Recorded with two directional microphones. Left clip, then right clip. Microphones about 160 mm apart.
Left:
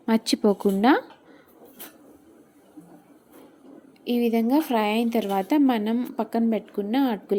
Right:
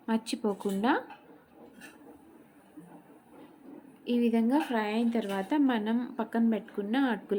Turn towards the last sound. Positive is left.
turn(degrees=25)  # may be behind; listen again after turning